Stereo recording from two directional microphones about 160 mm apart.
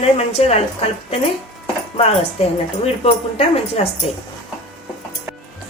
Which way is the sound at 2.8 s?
40° left (ahead or behind).